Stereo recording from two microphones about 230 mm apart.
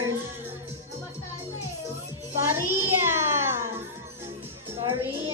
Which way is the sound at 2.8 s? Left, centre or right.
Centre.